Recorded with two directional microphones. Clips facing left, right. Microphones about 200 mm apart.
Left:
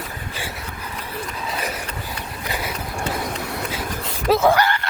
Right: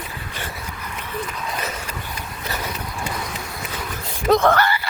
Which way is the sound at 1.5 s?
10° left (ahead or behind).